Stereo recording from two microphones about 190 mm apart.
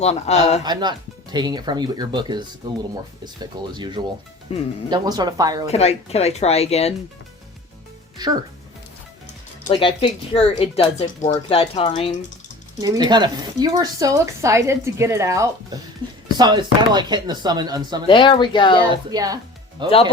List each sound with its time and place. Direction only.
0.0 s speech: 35° left (ahead or behind)
0.6 s speech: 20° right (ahead or behind)
3.8 s speech: 25° right (ahead or behind)
4.5 s speech: 30° left (ahead or behind)
4.9 s speech: 20° right (ahead or behind)
5.6 s speech: 35° left (ahead or behind)
8.2 s speech: 20° right (ahead or behind)
9.6 s speech: 25° left (ahead or behind)
12.8 s speech: 20° right (ahead or behind)
18.1 s speech: 25° left (ahead or behind)
18.9 s speech: 20° right (ahead or behind)